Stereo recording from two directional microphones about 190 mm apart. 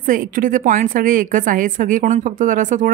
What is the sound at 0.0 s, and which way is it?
A woman's voice, 45° right (ahead or behind).